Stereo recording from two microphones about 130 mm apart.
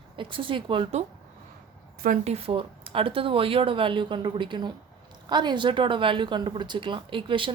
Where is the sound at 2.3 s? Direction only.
45° right (ahead or behind).